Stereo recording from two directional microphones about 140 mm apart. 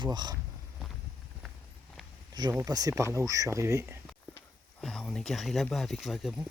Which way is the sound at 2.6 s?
25° right (ahead or behind).